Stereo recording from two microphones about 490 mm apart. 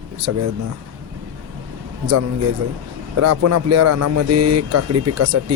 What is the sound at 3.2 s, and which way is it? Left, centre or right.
Speech, right.